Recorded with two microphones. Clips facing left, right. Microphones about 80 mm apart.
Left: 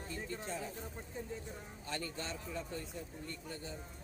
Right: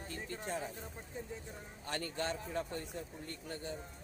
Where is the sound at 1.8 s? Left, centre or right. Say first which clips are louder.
Right 4 dB; right.